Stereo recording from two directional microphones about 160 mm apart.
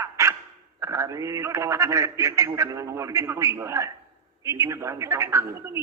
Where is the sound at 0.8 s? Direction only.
20° right (ahead or behind).